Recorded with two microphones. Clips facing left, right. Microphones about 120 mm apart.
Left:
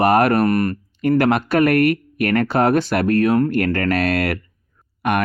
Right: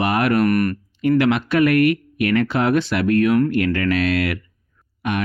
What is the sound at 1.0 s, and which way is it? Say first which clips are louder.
Speech: left 1 dB; 45° left (ahead or behind).